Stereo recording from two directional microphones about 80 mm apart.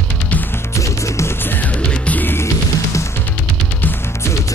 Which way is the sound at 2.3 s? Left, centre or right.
Left.